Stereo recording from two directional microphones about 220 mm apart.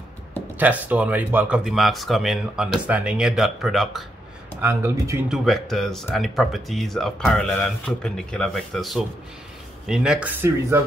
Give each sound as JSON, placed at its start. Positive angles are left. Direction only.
{"t": 0.6, "sound": "speech", "side_deg": -5}
{"t": 4.6, "sound": "speech", "side_deg": -10}
{"t": 5.4, "sound": "speech", "side_deg": 0}